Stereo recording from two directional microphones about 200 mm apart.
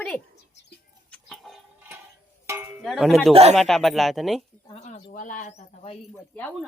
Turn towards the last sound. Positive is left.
turn(degrees=5)  # may be behind; listen again after turning